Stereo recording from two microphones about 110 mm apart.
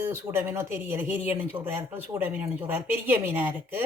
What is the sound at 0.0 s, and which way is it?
Speech, 20° right (ahead or behind).